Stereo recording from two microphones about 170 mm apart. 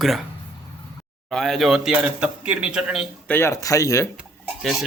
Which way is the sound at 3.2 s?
15° left (ahead or behind).